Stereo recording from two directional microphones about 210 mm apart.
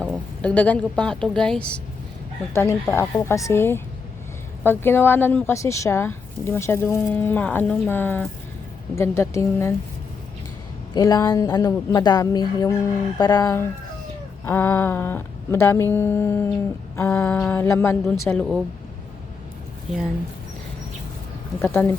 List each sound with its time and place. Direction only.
0.0 s a woman's voice: 5° left (ahead or behind)
10.9 s a woman's voice: 20° left (ahead or behind); by 18.6 s centre (ahead or behind)
21.6 s speech: 10° left (ahead or behind)